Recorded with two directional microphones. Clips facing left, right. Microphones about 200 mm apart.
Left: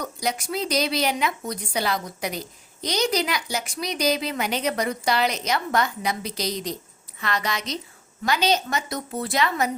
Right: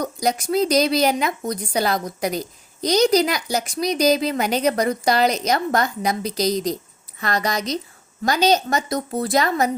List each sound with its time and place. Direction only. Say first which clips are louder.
0.0 s a woman's voice: right 6 dB; 40° right (ahead or behind)